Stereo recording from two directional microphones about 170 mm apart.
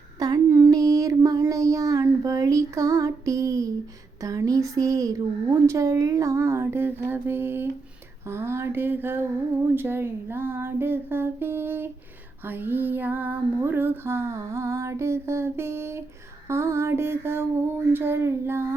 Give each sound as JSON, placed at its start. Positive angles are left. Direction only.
{"t": 0.2, "sound": "child singing", "side_deg": -20}
{"t": 4.2, "sound": "speech", "side_deg": -20}
{"t": 8.3, "sound": "female singing", "side_deg": -15}